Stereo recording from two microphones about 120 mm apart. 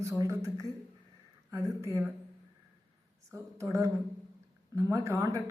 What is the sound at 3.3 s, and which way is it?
A man's voice, 25° right (ahead or behind).